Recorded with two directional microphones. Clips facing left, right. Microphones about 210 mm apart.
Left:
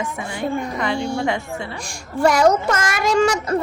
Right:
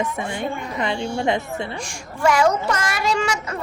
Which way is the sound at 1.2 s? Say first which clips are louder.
Right 1 dB; 20° right (ahead or behind).